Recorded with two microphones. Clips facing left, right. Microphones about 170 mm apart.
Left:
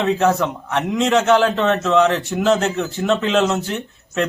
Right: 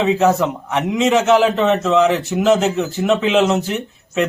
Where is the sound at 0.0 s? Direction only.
Centre (ahead or behind).